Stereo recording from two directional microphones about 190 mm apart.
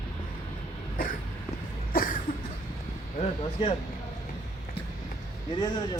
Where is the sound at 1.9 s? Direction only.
45° left (ahead or behind).